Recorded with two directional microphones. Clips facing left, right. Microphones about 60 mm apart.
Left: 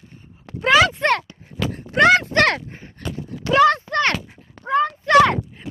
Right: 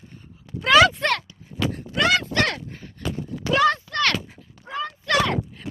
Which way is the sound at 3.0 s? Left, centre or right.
Left.